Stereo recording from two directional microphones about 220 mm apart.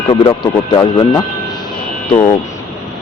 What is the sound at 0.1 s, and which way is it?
Speech, 25° left (ahead or behind).